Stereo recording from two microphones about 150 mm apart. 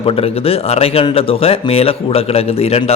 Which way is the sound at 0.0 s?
40° left (ahead or behind).